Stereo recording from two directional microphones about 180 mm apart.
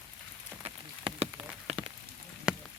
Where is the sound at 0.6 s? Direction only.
35° right (ahead or behind).